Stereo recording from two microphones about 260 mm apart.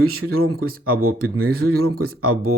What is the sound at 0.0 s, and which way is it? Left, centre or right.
Speech, right.